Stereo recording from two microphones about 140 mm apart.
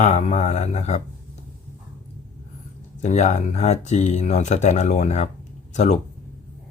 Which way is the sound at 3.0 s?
55° left (ahead or behind).